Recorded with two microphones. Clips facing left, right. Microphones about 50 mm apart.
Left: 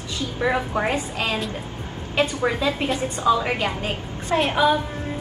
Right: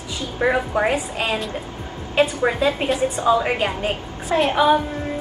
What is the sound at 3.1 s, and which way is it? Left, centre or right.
Speech, right.